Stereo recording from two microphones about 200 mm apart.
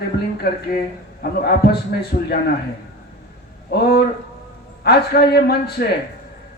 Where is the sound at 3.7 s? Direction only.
55° left (ahead or behind).